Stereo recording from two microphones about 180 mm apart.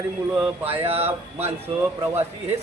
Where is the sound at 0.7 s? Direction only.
30° right (ahead or behind).